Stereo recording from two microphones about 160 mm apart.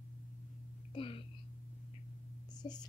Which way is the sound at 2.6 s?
25° left (ahead or behind).